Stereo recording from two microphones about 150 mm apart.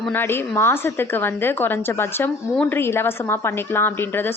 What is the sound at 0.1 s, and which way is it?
A woman's voice, 15° left (ahead or behind).